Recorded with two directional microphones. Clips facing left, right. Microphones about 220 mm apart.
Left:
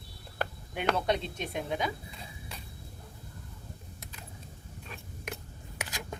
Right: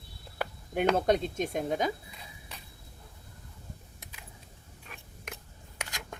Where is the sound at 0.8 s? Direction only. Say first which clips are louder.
Right 4 dB; 45° right (ahead or behind).